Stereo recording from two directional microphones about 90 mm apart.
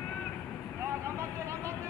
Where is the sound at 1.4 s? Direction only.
30° right (ahead or behind).